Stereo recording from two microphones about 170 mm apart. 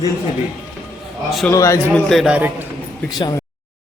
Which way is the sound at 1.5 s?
15° left (ahead or behind).